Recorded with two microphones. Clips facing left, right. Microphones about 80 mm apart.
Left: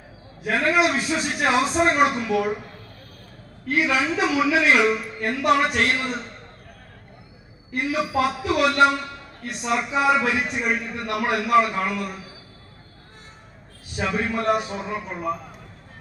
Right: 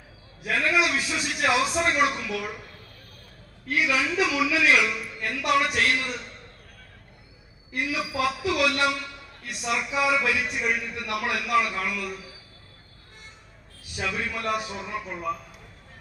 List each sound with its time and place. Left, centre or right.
0.4 s a man's voice: left
3.7 s a man's voice: left
7.7 s a man's voice: left
13.8 s a man's voice: left